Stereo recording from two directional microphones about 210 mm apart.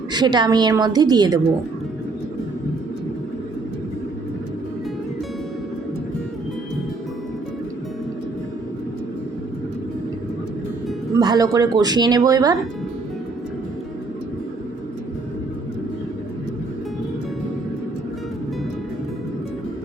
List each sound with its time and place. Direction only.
0.1 s speech: 20° right (ahead or behind)
11.2 s speech: 20° right (ahead or behind)